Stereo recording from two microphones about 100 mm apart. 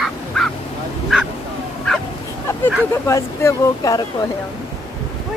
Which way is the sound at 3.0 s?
30° left (ahead or behind).